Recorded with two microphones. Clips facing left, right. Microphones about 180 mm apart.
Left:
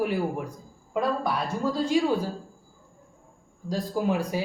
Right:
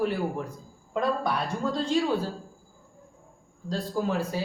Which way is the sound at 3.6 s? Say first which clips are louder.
Left 2 dB; 10° left (ahead or behind).